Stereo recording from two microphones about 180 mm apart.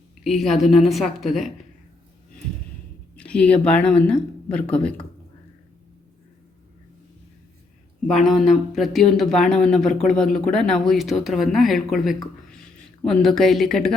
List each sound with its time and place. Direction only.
0.3 s speech: centre (ahead or behind)
3.2 s speech: 5° left (ahead or behind)
8.0 s speech: centre (ahead or behind)